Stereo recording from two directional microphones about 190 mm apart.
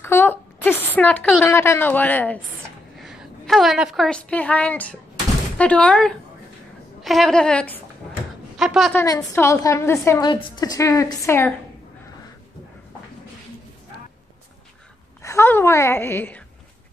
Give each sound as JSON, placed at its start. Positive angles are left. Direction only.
{"t": 0.0, "sound": "a woman's voice", "side_deg": 10}
{"t": 8.9, "sound": "a woman's voice", "side_deg": 15}
{"t": 10.3, "sound": "a woman's voice", "side_deg": 25}
{"t": 15.2, "sound": "a woman's voice", "side_deg": 10}